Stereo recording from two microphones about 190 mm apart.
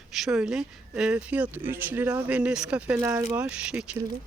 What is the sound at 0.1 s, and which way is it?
Speech, 5° right (ahead or behind).